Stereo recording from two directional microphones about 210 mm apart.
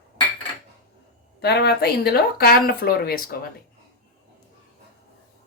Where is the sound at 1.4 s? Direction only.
50° left (ahead or behind).